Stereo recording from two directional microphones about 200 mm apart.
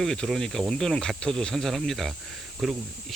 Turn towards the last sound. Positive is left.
turn(degrees=0)  # may be behind; listen again after turning